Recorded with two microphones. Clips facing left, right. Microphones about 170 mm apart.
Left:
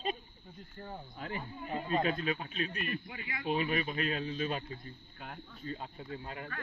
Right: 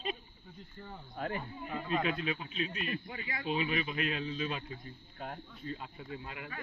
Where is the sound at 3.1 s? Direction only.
35° right (ahead or behind).